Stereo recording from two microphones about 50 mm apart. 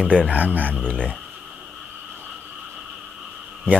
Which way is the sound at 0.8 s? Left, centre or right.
Left.